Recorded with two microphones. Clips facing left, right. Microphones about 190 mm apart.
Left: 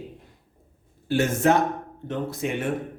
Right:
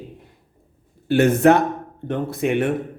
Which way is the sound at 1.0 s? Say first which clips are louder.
Right 7 dB; 65° right (ahead or behind).